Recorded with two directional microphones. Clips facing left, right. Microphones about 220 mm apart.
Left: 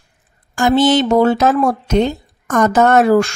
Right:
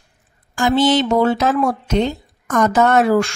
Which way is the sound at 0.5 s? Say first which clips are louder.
Left 3 dB; 45° left (ahead or behind).